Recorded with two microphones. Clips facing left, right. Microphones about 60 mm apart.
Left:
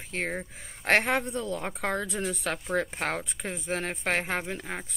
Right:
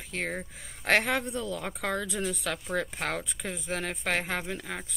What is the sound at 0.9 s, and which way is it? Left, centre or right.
Speech, left.